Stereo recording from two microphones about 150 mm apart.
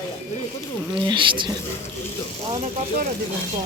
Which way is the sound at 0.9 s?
35° right (ahead or behind).